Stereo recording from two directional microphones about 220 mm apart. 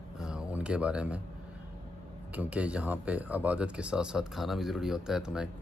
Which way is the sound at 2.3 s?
5° right (ahead or behind).